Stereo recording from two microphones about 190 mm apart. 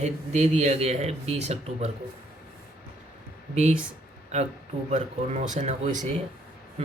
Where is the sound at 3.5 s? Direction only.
35° right (ahead or behind).